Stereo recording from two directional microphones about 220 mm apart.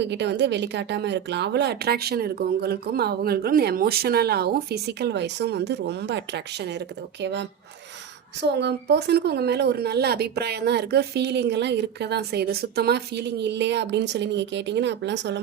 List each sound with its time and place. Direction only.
0.0 s speech: 50° right (ahead or behind)